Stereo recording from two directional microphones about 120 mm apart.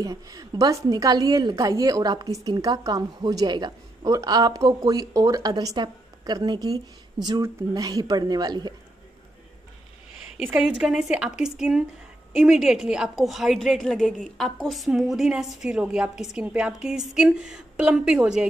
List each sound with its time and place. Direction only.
0.0 s a woman's voice: 30° right (ahead or behind)
10.6 s a woman's voice: 5° right (ahead or behind)